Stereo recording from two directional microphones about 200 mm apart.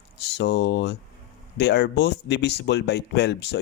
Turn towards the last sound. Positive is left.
turn(degrees=60)  # may be behind; listen again after turning